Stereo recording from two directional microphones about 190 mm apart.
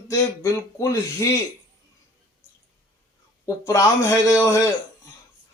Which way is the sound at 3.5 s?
15° left (ahead or behind).